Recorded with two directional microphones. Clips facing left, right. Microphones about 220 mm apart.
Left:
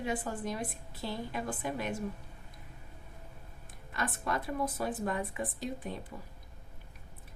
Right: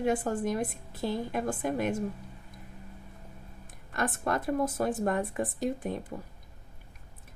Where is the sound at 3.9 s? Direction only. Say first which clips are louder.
Right 5 dB; 50° right (ahead or behind).